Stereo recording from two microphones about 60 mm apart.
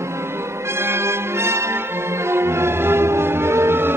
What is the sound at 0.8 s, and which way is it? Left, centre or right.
Music, right.